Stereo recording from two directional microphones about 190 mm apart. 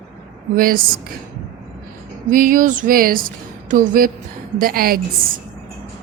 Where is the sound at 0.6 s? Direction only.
50° right (ahead or behind).